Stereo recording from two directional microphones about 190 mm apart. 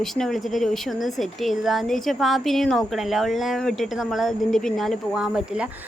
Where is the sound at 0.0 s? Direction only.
Centre (ahead or behind).